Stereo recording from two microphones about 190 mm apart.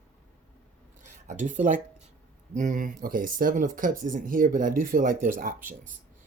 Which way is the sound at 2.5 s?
40° right (ahead or behind).